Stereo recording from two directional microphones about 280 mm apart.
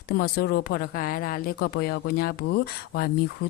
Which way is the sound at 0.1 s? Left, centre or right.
Left.